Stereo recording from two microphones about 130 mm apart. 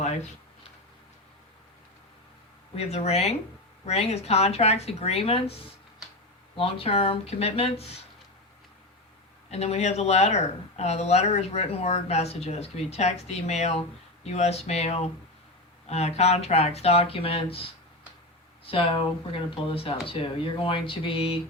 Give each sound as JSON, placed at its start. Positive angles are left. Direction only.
{"t": 0.0, "sound": "a sound", "side_deg": 60}
{"t": 2.7, "sound": "speech", "side_deg": 55}
{"t": 6.6, "sound": "speech", "side_deg": 45}
{"t": 9.5, "sound": "speech", "side_deg": 55}